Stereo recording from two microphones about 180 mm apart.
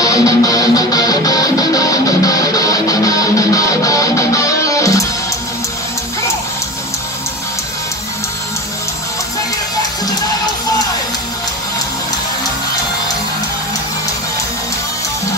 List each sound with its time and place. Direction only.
0.0 s music: 20° left (ahead or behind)